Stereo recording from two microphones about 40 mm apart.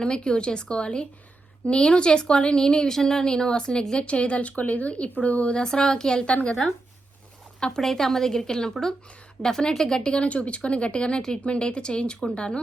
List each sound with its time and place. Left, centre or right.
0.0 s speech: left
5.6 s a woman's voice: centre
7.6 s a woman's voice: centre
10.1 s speech: left